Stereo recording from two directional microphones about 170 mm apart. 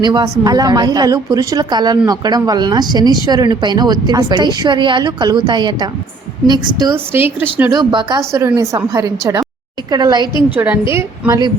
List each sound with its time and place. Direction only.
0.0 s a woman's voice: 25° right (ahead or behind)
7.3 s a woman's voice: 10° right (ahead or behind)
7.7 s a woman's voice: 25° right (ahead or behind)
10.5 s a woman's voice: 10° right (ahead or behind)